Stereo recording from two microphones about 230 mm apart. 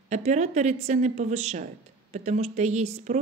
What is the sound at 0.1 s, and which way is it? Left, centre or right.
A woman's voice, right.